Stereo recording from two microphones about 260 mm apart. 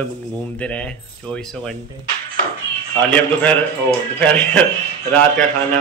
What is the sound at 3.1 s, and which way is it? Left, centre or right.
Speech, centre.